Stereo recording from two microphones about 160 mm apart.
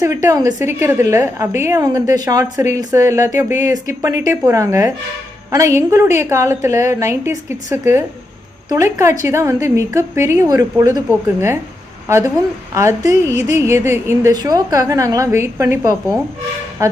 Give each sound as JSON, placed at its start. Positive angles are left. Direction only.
{"t": 0.0, "sound": "a woman's voice", "side_deg": -20}